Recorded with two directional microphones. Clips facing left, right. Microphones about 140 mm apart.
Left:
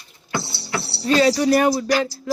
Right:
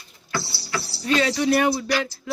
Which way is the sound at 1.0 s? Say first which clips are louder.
Left 5 dB; 35° left (ahead or behind).